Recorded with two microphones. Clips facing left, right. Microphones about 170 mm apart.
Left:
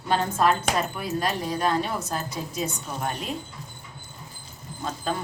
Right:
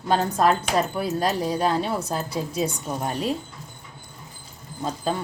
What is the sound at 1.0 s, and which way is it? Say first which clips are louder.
A woman's voice: right 4 dB; 35° right (ahead or behind).